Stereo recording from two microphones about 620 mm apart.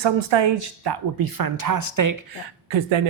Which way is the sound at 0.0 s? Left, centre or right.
Right.